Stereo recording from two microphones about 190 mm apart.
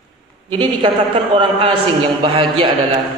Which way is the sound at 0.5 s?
25° right (ahead or behind).